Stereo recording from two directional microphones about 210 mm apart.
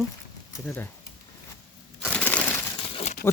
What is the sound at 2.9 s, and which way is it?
Crumpling, 25° left (ahead or behind).